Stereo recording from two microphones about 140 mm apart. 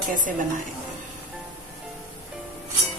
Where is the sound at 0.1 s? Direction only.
70° right (ahead or behind).